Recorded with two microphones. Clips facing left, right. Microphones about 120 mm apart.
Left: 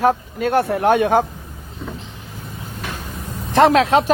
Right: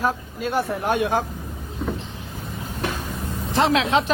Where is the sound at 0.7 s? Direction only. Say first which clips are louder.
Left 7 dB; 65° left (ahead or behind).